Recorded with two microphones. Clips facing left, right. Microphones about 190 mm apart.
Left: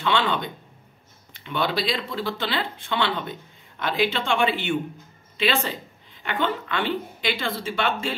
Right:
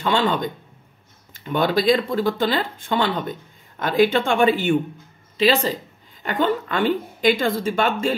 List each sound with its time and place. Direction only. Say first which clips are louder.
0.0 s a woman's voice: right 3 dB; 40° right (ahead or behind)